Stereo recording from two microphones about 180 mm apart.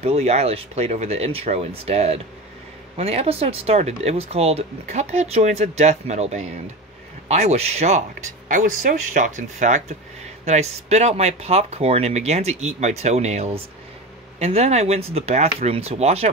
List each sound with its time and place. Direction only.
0.0 s speech: 35° right (ahead or behind)